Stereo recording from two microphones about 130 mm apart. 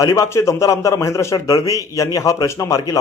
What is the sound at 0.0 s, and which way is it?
Speech, 25° left (ahead or behind).